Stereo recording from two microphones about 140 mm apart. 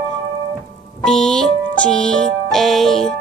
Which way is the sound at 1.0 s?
5° left (ahead or behind).